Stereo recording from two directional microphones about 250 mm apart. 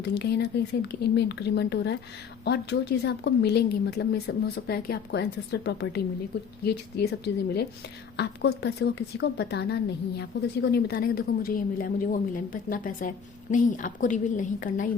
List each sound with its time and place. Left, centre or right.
0.0 s speech: left